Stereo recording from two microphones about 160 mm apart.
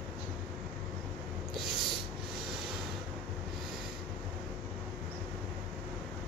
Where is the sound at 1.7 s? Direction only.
Centre (ahead or behind).